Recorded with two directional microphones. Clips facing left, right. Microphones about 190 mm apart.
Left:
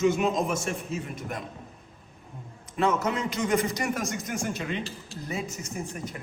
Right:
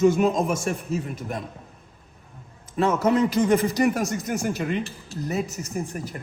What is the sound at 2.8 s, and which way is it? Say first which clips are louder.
A man's voice: right 6 dB; 35° right (ahead or behind).